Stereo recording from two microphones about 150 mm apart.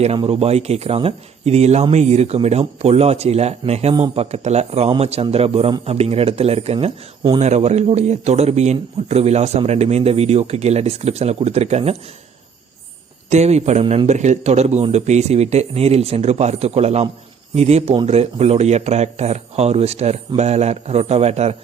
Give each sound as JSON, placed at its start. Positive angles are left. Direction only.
{"t": 0.0, "sound": "speech", "side_deg": -40}
{"t": 3.9, "sound": "speech", "side_deg": -30}
{"t": 4.2, "sound": "speech", "side_deg": -45}
{"t": 13.3, "sound": "speech", "side_deg": -50}